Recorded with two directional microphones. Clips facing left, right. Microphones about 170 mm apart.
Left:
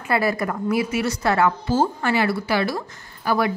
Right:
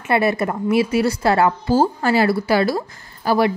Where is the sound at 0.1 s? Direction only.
25° right (ahead or behind).